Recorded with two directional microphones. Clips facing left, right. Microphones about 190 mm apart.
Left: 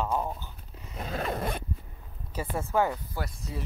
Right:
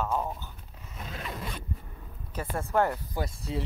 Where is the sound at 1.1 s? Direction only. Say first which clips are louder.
Left 7 dB; 50° left (ahead or behind).